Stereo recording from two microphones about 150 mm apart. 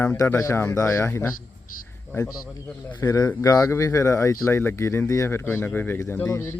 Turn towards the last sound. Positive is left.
turn(degrees=15)  # may be behind; listen again after turning